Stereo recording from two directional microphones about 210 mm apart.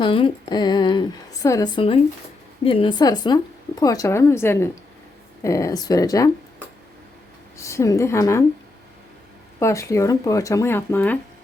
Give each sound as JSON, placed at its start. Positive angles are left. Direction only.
{"t": 0.0, "sound": "a woman's voice", "side_deg": 25}
{"t": 7.5, "sound": "a woman's voice", "side_deg": 15}
{"t": 9.6, "sound": "a woman's voice", "side_deg": 15}